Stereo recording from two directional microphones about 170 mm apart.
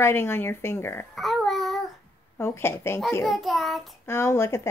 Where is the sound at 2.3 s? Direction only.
15° left (ahead or behind).